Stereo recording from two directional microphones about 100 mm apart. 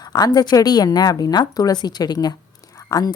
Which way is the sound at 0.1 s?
40° left (ahead or behind).